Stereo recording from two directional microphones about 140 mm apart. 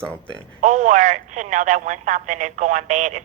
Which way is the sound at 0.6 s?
65° right (ahead or behind).